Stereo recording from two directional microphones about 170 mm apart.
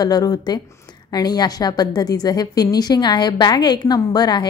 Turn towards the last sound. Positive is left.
turn(degrees=25)  # may be behind; listen again after turning